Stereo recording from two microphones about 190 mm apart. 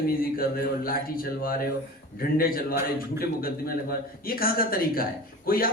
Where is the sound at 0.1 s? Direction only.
50° left (ahead or behind).